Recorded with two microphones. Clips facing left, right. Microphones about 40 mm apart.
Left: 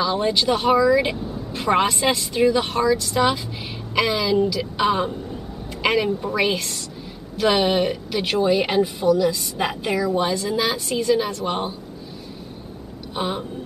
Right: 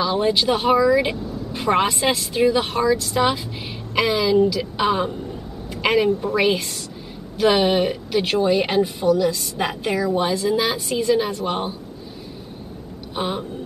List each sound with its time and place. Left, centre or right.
0.0 s a woman's voice: centre
1.1 s vehicle: centre
1.5 s a woman's voice: centre
13.1 s a woman's voice: centre